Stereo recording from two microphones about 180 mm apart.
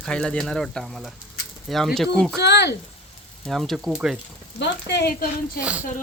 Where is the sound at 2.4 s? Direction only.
70° left (ahead or behind).